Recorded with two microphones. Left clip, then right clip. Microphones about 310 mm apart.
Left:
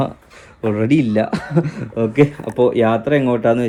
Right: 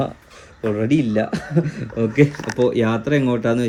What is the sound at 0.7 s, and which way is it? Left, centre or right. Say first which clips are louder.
Speech: left 3 dB; centre.